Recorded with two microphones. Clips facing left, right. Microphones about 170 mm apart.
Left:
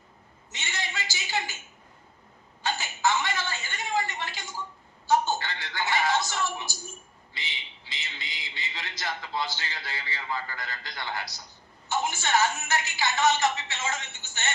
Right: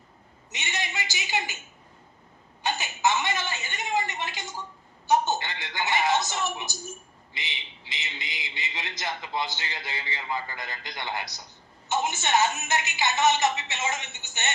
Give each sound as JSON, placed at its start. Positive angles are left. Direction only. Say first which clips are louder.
{"t": 0.5, "sound": "a man's voice", "louder": "right 2 dB", "side_deg": -20}
{"t": 2.6, "sound": "a man's voice", "louder": "right 1 dB", "side_deg": -20}